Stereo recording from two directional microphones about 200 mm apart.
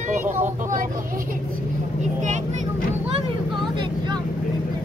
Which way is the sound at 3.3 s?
25° right (ahead or behind).